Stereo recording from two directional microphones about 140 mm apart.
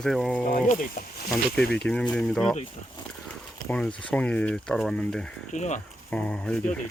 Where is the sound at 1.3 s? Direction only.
5° left (ahead or behind).